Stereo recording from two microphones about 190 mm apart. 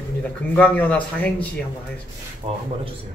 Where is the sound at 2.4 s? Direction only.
30° right (ahead or behind).